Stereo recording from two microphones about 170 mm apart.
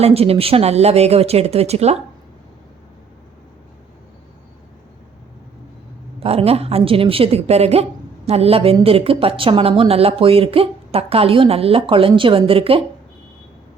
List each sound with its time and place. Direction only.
0.0 s a woman's voice: 35° right (ahead or behind)
6.1 s a woman's voice: 35° right (ahead or behind)